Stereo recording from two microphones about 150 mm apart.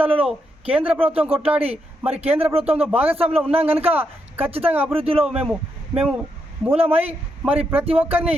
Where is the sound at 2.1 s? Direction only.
40° right (ahead or behind).